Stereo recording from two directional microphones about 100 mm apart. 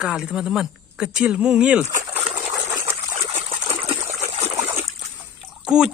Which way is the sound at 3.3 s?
80° right.